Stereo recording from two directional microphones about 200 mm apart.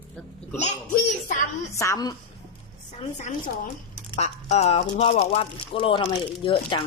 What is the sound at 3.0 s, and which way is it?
Speech, 35° left (ahead or behind).